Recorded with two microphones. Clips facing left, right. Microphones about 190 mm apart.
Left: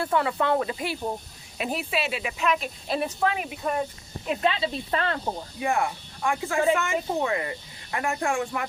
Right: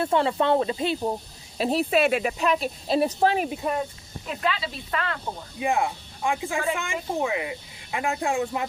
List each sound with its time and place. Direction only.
0.0 s speech: 25° right (ahead or behind); by 2.3 s 50° right (ahead or behind)
2.4 s speech: 35° right (ahead or behind)
3.6 s speech: centre (ahead or behind)
4.3 s speech: 25° left (ahead or behind)
5.5 s speech: 15° right (ahead or behind)